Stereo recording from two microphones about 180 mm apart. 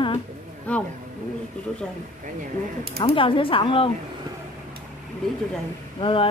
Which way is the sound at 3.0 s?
30° left (ahead or behind).